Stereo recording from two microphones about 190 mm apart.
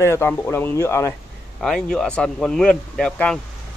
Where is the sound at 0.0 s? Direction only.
15° left (ahead or behind).